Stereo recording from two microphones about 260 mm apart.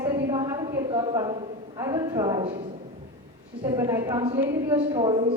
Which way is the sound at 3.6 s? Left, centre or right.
Centre.